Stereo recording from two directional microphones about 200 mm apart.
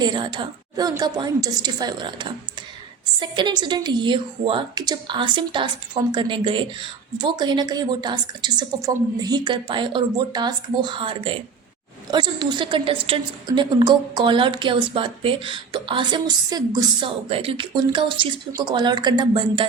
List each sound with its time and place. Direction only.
0.0 s a woman's voice: 20° right (ahead or behind)